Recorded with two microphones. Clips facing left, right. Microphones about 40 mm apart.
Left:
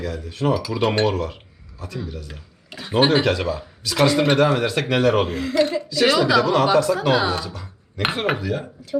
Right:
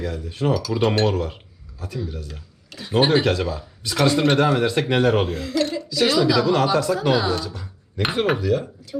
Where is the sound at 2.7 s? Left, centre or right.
Centre.